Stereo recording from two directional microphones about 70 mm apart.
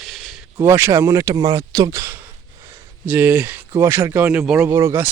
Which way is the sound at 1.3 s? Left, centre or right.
Right.